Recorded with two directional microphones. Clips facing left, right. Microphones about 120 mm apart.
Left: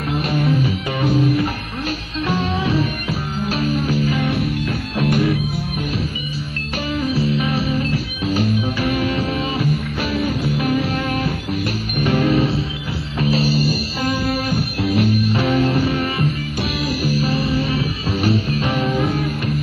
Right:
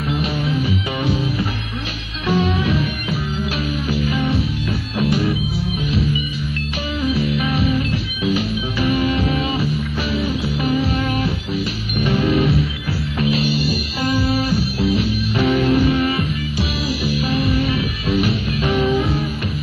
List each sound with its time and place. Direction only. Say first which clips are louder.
0.7 s music: left 1 dB; 50° left (ahead or behind)
4.2 s music: even; 55° left (ahead or behind)
7.5 s music: right 1 dB; 35° left (ahead or behind)
12.4 s music: right 1 dB; 30° left (ahead or behind)
18.1 s music: even; 40° left (ahead or behind)